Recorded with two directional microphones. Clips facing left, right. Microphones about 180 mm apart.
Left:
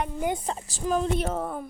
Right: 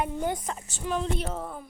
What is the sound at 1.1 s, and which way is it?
Speech, 55° left (ahead or behind).